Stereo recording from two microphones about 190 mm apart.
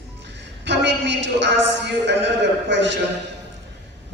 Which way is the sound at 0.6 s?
65° right (ahead or behind).